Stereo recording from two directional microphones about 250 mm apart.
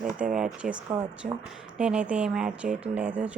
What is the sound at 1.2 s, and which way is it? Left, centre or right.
Speech, right.